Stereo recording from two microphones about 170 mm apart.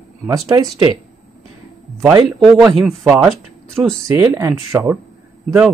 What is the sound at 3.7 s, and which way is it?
Speech, 15° right (ahead or behind).